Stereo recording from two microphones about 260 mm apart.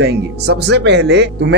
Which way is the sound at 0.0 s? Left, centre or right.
Right.